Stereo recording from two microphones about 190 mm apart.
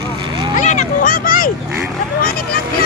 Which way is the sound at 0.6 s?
40° left (ahead or behind).